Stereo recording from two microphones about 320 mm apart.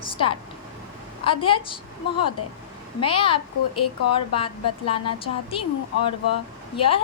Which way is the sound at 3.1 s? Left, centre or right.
Centre.